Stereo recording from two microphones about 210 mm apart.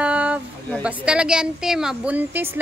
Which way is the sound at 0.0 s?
5° right (ahead or behind).